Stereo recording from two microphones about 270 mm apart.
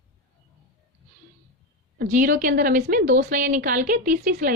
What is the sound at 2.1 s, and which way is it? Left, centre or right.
A woman's voice, right.